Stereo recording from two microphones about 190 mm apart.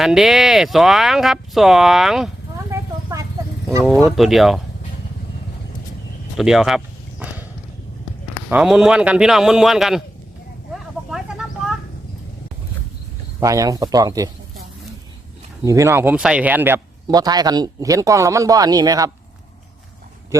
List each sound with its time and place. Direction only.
0.0 s speech: centre (ahead or behind)
2.6 s vehicle: 15° right (ahead or behind)
3.8 s speech: centre (ahead or behind)
6.3 s a sound: centre (ahead or behind)
8.4 s speech: 5° right (ahead or behind)
11.1 s vehicle: 5° right (ahead or behind)
13.4 s speech: 20° right (ahead or behind)
15.6 s a man's voice: 15° right (ahead or behind)